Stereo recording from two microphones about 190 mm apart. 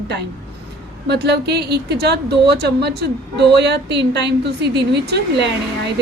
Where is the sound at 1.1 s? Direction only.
60° right (ahead or behind).